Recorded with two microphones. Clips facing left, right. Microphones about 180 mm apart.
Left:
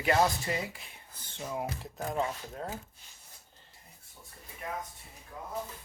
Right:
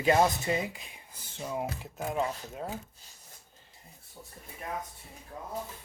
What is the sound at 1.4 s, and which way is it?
Speech, centre (ahead or behind).